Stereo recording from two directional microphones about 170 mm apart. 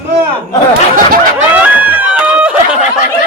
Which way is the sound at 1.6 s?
10° right (ahead or behind).